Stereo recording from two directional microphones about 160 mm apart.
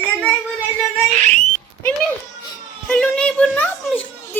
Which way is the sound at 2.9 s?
5° left (ahead or behind).